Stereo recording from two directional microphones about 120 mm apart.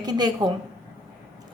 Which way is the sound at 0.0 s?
35° right (ahead or behind).